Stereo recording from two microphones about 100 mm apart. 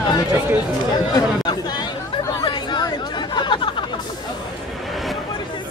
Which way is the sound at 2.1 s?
50° left (ahead or behind).